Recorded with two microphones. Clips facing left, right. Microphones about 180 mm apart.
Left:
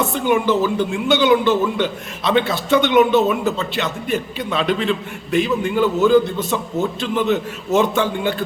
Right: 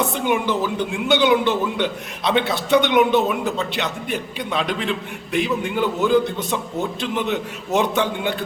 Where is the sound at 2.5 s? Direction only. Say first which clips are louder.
Left 1 dB; 15° right (ahead or behind).